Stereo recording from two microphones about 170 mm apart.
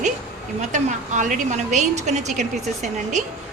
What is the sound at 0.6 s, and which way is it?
A woman's voice, 45° right (ahead or behind).